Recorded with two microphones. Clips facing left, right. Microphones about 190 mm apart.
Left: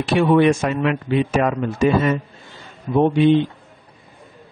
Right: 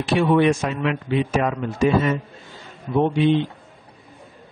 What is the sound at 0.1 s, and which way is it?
Speech, 55° left (ahead or behind).